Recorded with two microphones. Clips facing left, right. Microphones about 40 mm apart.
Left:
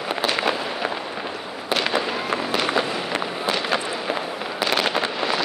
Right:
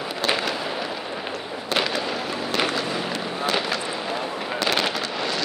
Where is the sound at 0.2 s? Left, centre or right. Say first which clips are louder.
Left 1 dB; centre.